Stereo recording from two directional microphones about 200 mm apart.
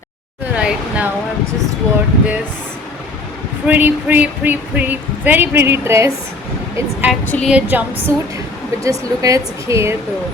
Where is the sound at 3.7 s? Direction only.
10° right (ahead or behind).